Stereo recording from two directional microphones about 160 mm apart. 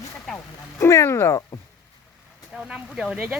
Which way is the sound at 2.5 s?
5° right (ahead or behind).